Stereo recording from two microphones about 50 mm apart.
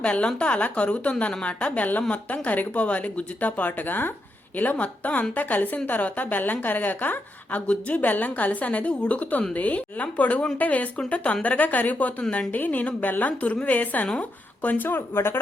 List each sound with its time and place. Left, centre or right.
0.0 s a woman's voice: left